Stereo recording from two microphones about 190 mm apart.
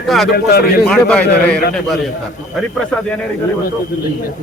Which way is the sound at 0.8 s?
5° left (ahead or behind).